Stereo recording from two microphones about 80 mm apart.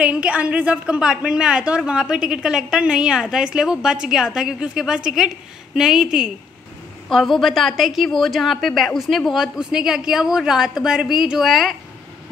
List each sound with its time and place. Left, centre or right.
0.0 s a woman's voice: centre
7.1 s a woman's voice: centre